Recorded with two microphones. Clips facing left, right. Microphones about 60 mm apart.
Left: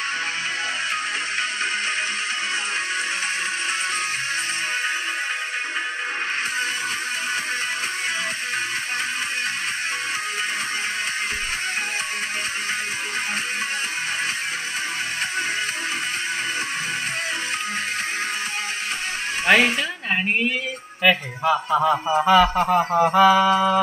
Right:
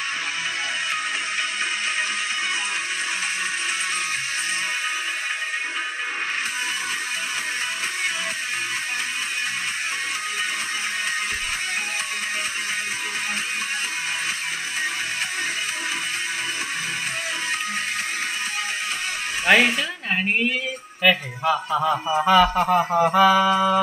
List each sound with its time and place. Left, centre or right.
19.4 s a sound: centre
21.0 s a man's voice: centre
22.9 s mantra: centre